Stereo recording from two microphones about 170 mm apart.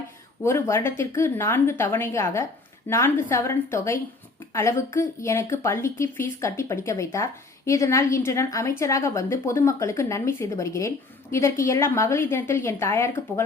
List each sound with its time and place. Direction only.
0.4 s a woman's voice: 15° left (ahead or behind)